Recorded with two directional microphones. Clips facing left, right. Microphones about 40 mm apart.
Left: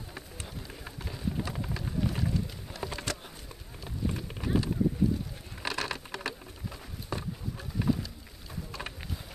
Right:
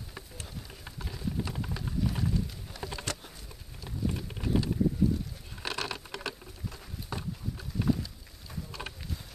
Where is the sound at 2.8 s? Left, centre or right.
Centre.